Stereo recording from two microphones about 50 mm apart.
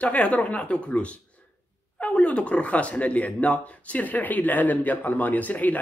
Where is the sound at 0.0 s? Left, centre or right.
Left.